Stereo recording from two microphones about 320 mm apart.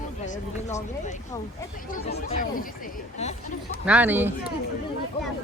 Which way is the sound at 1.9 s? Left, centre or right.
Left.